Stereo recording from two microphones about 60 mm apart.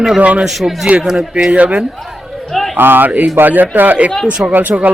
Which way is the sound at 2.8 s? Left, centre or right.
Right.